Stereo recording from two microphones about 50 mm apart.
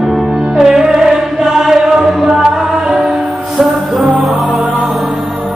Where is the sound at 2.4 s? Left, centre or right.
Centre.